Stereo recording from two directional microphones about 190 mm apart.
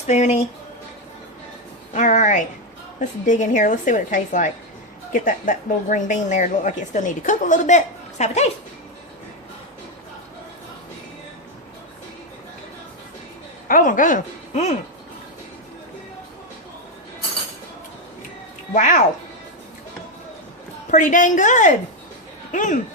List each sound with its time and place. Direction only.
0.1 s a woman's voice: 35° left (ahead or behind)
1.9 s a woman's voice: 40° left (ahead or behind)
13.7 s speech: 45° left (ahead or behind)
18.7 s a woman's voice: 40° left (ahead or behind)
20.9 s a woman's voice: 40° left (ahead or behind)